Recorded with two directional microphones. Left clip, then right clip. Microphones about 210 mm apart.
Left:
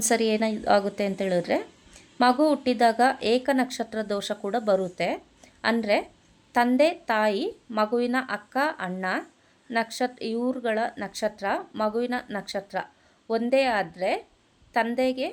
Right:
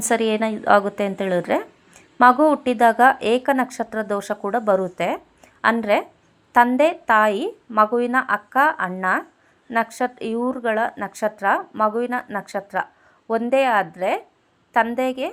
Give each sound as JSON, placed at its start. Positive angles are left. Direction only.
{"t": 0.1, "sound": "speech", "side_deg": 0}